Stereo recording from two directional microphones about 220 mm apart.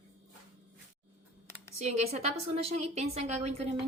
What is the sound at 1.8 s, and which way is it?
A woman's voice, 30° right (ahead or behind).